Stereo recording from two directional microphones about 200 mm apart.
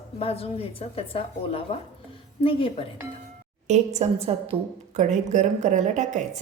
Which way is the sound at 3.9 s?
30° right (ahead or behind).